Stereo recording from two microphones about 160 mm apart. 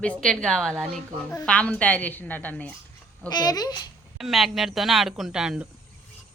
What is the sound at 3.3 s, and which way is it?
Speech, 25° left (ahead or behind).